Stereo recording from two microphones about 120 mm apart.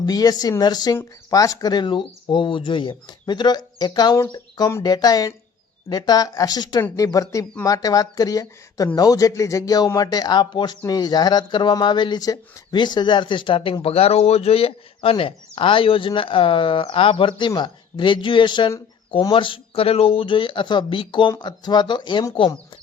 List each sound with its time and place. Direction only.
0.0 s a man's voice: 35° left (ahead or behind)